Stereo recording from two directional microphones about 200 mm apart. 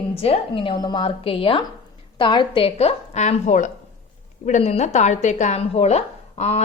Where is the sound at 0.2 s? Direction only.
30° left (ahead or behind).